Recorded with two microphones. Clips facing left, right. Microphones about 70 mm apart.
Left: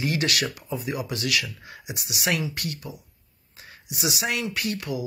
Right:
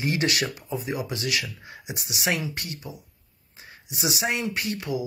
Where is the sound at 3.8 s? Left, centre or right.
Right.